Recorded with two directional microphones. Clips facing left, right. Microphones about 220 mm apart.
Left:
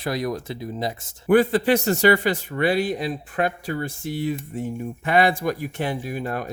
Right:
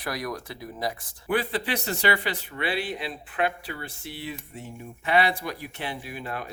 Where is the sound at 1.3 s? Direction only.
45° left (ahead or behind).